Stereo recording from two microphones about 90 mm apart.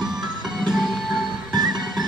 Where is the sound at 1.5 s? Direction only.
50° right (ahead or behind).